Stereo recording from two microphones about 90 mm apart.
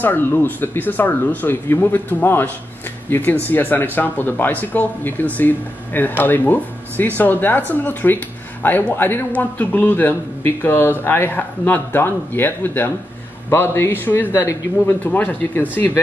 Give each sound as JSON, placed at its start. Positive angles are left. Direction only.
{"t": 0.0, "sound": "speech", "side_deg": 20}